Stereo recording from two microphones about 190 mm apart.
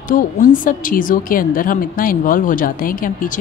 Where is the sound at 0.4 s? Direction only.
45° left (ahead or behind).